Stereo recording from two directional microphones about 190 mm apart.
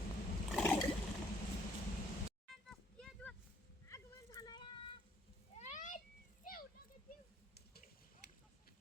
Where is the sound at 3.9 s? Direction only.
20° left (ahead or behind).